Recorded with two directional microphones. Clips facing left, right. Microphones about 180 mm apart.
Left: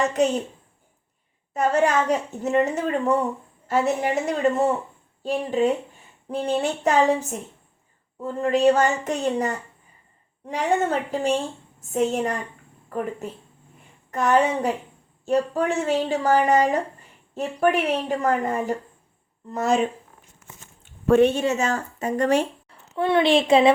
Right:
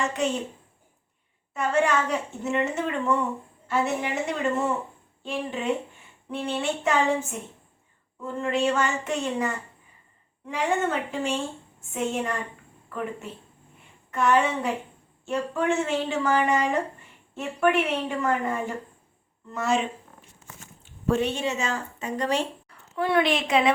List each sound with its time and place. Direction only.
0.0 s a woman's voice: 40° left (ahead or behind)
1.5 s a woman's voice: 40° left (ahead or behind)
14.1 s a woman's voice: 40° left (ahead or behind)
20.8 s speech: 60° left (ahead or behind)
22.7 s a woman's voice: 25° left (ahead or behind)